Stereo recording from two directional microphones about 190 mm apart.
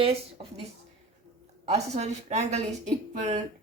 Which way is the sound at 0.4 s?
25° right (ahead or behind).